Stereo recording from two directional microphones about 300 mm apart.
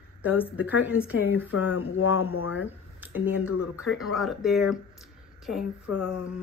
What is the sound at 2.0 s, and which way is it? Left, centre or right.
Speech, left.